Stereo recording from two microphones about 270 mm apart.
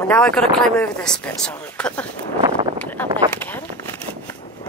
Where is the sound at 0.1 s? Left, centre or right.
Centre.